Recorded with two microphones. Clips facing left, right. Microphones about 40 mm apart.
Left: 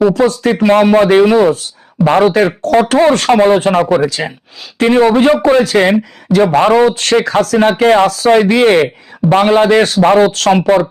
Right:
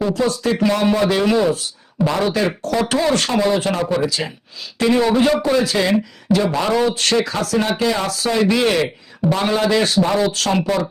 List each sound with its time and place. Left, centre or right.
0.0 s speech: left